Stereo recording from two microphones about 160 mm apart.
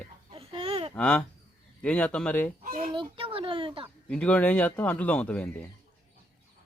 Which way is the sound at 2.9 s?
30° right (ahead or behind).